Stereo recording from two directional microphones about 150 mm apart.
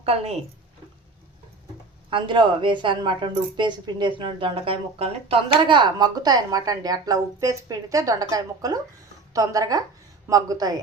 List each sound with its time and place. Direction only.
0.0 s a woman's voice: 40° right (ahead or behind)
2.0 s a woman's voice: 35° right (ahead or behind)